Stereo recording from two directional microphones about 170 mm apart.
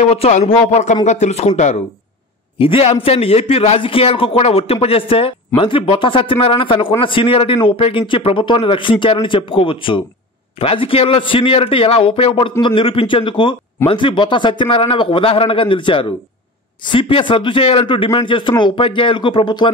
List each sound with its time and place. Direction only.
0.0 s speech: 40° left (ahead or behind)
2.6 s a man's voice: 35° left (ahead or behind)